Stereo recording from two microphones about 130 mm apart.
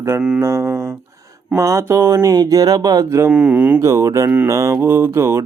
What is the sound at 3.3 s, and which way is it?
Speech, 10° right (ahead or behind).